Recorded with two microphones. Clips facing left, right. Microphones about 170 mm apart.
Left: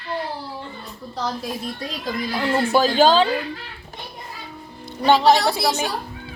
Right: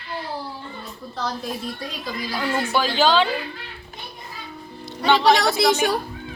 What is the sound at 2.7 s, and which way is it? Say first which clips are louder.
Speech: left 3 dB; 45° left (ahead or behind).